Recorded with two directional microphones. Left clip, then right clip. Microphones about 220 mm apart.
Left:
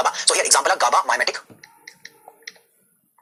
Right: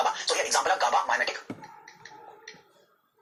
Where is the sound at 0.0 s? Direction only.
50° left (ahead or behind).